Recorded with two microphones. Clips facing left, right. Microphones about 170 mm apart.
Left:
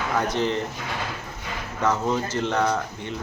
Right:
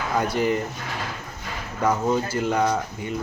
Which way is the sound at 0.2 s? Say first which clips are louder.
Right 2 dB; 10° right (ahead or behind).